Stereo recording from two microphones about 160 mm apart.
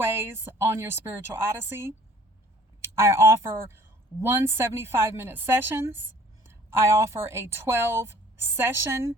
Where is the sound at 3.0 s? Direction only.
15° right (ahead or behind).